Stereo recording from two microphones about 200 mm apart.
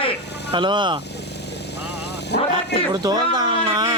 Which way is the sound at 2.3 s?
55° left (ahead or behind).